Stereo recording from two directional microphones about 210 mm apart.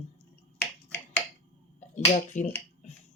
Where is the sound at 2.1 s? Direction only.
35° left (ahead or behind).